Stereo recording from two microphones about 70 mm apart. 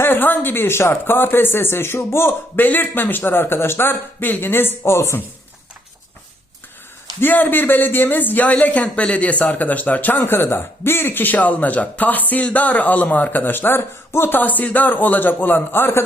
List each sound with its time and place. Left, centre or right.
0.0 s speech: left
4.8 s speech: left
7.2 s speech: left